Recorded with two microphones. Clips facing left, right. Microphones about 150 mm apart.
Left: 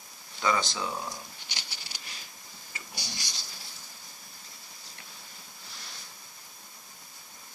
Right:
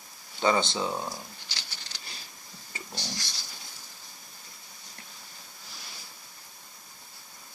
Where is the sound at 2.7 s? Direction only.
30° right (ahead or behind).